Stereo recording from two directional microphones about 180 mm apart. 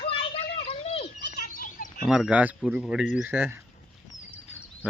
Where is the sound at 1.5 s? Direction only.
45° left (ahead or behind).